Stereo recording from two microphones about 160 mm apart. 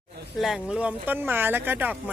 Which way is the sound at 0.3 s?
Centre (ahead or behind).